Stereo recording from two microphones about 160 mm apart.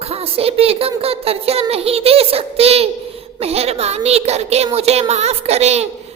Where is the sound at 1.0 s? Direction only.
40° right (ahead or behind).